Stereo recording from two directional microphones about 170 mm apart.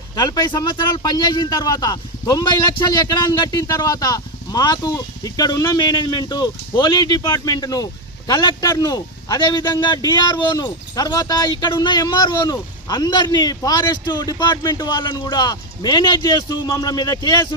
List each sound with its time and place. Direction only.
0.1 s a man's voice: 25° left (ahead or behind)